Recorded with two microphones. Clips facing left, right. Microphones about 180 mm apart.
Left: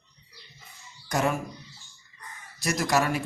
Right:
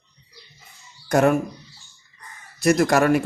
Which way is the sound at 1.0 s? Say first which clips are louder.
Right 9 dB; 55° right (ahead or behind).